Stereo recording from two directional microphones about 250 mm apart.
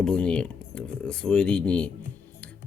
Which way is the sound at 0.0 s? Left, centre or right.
Centre.